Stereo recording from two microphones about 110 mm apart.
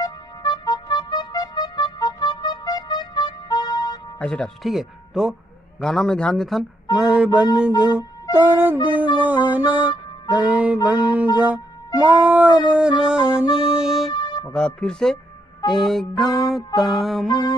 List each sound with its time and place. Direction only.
0.0 s music: 40° left (ahead or behind)
4.2 s speech: 10° left (ahead or behind)
4.6 s speech: centre (ahead or behind)
7.1 s music: 10° right (ahead or behind)
14.1 s music: 45° left (ahead or behind)
14.5 s speech: 5° left (ahead or behind)
17.3 s music: 40° left (ahead or behind)